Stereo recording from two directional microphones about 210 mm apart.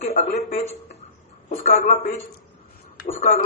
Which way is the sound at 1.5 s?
40° left (ahead or behind).